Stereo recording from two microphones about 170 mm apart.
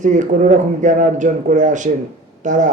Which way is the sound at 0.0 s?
45° right (ahead or behind).